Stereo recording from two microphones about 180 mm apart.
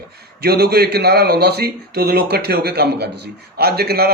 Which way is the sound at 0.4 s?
60° right (ahead or behind).